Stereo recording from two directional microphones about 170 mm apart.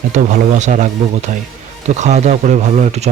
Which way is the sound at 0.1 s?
45° right (ahead or behind).